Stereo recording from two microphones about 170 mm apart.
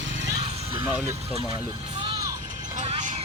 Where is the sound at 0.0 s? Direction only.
90° right.